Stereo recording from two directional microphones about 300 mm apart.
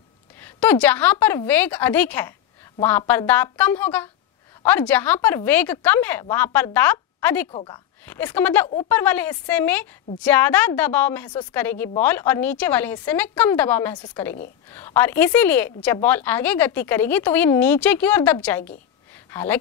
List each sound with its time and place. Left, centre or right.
0.4 s a woman's voice: centre
8.0 s a woman's voice: centre